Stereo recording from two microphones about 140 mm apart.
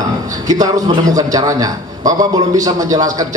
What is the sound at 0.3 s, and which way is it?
A man's voice, 25° right (ahead or behind).